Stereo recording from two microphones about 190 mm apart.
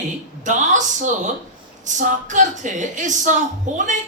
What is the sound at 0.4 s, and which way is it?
A woman's voice, 40° right (ahead or behind).